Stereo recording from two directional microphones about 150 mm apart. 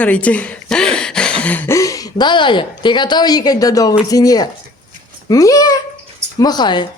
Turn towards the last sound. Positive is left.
turn(degrees=30)  # may be behind; listen again after turning